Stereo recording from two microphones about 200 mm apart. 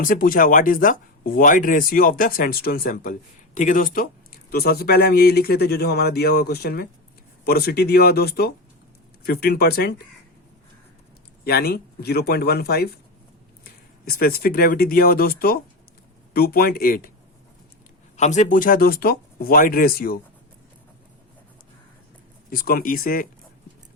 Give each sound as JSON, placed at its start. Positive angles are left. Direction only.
{"t": 0.0, "sound": "speech", "side_deg": 45}
{"t": 11.4, "sound": "speech", "side_deg": 50}
{"t": 14.0, "sound": "speech", "side_deg": 50}
{"t": 18.2, "sound": "speech", "side_deg": 35}
{"t": 22.4, "sound": "speech", "side_deg": 45}